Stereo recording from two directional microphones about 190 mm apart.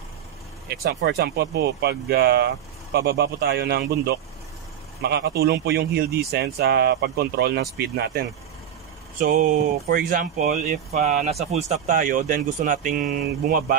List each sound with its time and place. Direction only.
0.7 s speech: 60° right (ahead or behind)
9.2 s speech: 45° right (ahead or behind)